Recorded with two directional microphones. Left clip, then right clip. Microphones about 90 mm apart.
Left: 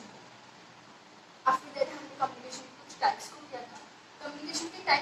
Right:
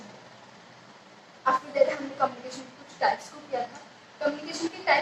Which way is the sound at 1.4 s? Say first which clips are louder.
Right 5 dB; 40° right (ahead or behind).